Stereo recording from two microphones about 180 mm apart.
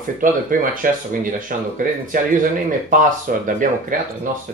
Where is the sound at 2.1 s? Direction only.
50° right (ahead or behind).